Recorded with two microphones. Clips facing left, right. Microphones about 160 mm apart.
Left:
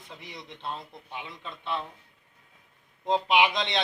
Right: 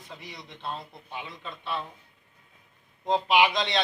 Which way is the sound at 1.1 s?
15° left (ahead or behind).